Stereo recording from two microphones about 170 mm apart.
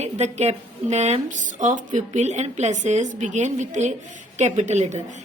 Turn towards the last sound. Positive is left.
turn(degrees=-45)  # may be behind; listen again after turning